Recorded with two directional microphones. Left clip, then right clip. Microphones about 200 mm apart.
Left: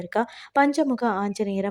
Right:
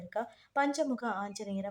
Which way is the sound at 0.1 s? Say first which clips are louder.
Left 11 dB; 40° left (ahead or behind).